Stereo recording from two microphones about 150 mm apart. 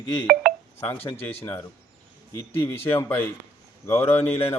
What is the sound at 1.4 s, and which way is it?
Speech, 15° left (ahead or behind).